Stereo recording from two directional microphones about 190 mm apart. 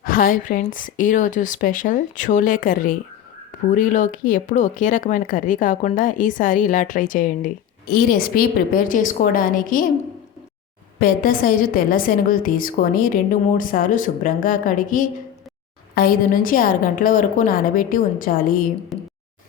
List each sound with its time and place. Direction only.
0.0 s speech: 50° left (ahead or behind)
11.0 s speech: 50° left (ahead or behind)
18.9 s a sound: centre (ahead or behind)